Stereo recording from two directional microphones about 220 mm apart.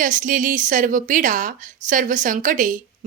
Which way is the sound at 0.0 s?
35° right (ahead or behind).